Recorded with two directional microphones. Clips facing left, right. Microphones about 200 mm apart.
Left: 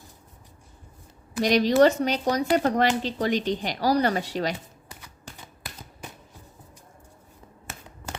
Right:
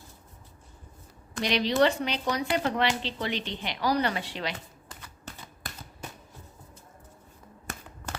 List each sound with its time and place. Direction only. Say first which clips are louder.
1.4 s speech: left 6 dB; 45° left (ahead or behind)